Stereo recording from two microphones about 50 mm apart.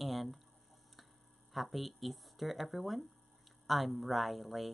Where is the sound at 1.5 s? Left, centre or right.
Centre.